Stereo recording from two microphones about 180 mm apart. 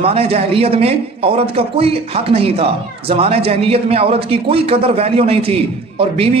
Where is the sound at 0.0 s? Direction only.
35° right (ahead or behind).